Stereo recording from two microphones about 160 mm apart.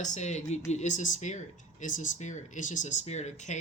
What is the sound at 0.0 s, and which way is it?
Speech, 45° left (ahead or behind).